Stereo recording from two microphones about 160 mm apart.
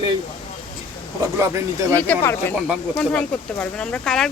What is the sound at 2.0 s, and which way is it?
Speech, 10° left (ahead or behind).